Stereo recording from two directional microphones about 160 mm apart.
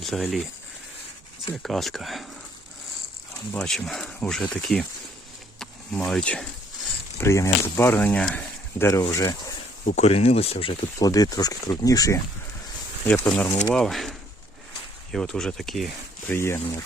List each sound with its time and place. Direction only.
0.0 s speech: centre (ahead or behind)
1.6 s speech: centre (ahead or behind)
3.5 s speech: 5° left (ahead or behind)
6.1 s speech: 5° left (ahead or behind)
7.2 s speech: 20° left (ahead or behind)
9.8 s speech: 45° left (ahead or behind)
11.0 s speech: 25° left (ahead or behind)
13.2 s speech: 5° left (ahead or behind)
16.3 s speech: 15° left (ahead or behind)